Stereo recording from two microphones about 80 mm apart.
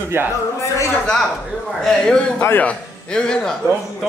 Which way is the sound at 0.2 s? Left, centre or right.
Right.